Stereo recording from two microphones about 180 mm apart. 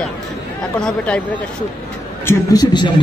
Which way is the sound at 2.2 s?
15° left (ahead or behind).